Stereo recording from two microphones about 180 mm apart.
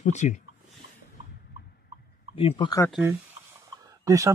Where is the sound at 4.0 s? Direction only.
15° right (ahead or behind).